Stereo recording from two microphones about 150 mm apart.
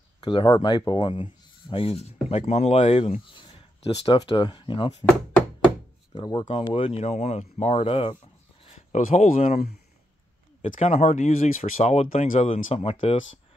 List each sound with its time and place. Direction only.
0.2 s speech: 35° left (ahead or behind)
6.1 s speech: 30° left (ahead or behind)
8.6 s speech: 55° left (ahead or behind)
10.6 s speech: 55° left (ahead or behind)